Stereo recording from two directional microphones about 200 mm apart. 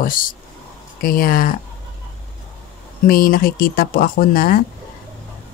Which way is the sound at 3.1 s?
45° left (ahead or behind).